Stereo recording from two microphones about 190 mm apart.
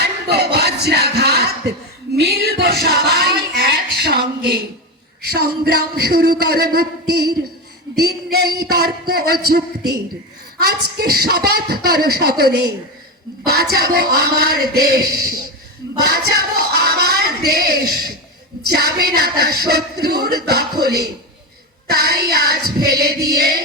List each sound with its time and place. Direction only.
0.0 s a sound: 60° right (ahead or behind)
5.3 s a woman's voice: 55° right (ahead or behind)
18.9 s a woman's voice: 55° right (ahead or behind)
21.8 s a woman's voice: 55° right (ahead or behind)